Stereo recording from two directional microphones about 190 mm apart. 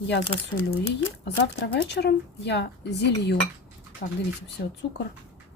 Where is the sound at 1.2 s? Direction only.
65° left (ahead or behind).